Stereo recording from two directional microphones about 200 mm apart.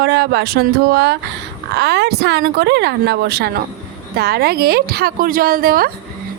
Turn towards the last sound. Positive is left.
turn(degrees=-50)  # may be behind; listen again after turning